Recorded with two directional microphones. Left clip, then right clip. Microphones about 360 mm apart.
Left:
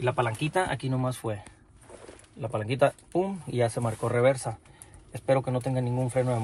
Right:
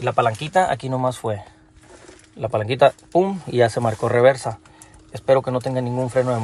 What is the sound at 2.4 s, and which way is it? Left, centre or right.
Speech, right.